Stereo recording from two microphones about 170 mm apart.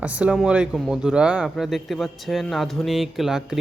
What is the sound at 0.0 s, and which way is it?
Speech, 10° right (ahead or behind).